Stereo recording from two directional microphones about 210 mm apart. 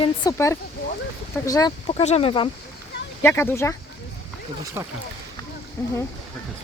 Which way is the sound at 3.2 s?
10° left (ahead or behind).